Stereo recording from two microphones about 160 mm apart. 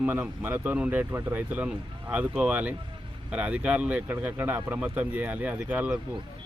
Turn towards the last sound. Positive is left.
turn(degrees=-10)  # may be behind; listen again after turning